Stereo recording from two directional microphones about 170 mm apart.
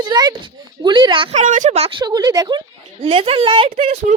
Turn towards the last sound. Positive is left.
turn(degrees=-30)  # may be behind; listen again after turning